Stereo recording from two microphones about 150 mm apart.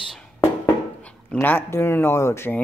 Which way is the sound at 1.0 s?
10° left (ahead or behind).